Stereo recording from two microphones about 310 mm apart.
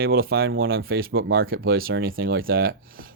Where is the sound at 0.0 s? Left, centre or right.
Right.